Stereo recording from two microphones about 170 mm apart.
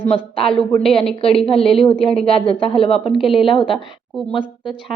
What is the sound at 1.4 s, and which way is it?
A woman's voice, 35° left (ahead or behind).